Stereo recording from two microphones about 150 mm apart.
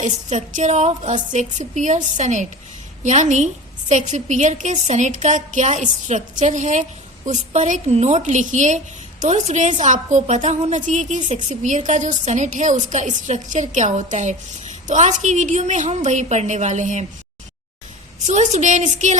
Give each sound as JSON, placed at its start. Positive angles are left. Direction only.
{"t": 0.0, "sound": "a woman's voice", "side_deg": -55}
{"t": 18.3, "sound": "a woman's voice", "side_deg": -50}